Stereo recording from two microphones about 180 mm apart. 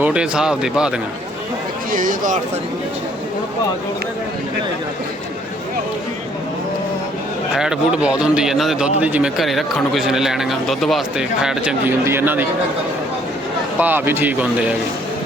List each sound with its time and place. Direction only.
0.0 s speech: 5° right (ahead or behind)
1.9 s speech: 50° right (ahead or behind)
7.5 s speech: 5° right (ahead or behind)
13.7 s speech: 10° right (ahead or behind)